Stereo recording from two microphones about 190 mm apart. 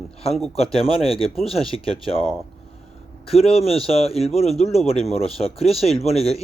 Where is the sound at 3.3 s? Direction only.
30° left (ahead or behind).